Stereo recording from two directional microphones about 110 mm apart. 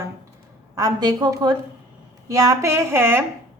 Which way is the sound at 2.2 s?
30° right (ahead or behind).